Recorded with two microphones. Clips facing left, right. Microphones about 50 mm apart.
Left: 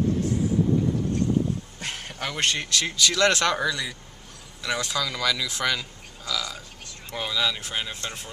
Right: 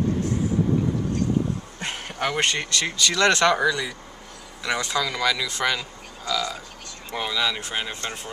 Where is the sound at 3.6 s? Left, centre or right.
Right.